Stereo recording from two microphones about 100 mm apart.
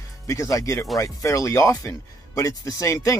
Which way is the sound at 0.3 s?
35° left (ahead or behind).